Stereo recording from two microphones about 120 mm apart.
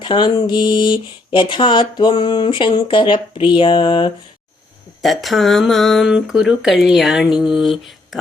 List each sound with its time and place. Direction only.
0.0 s speech: 40° left (ahead or behind)
5.0 s speech: centre (ahead or behind)